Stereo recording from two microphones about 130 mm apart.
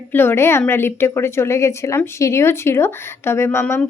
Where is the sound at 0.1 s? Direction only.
15° left (ahead or behind).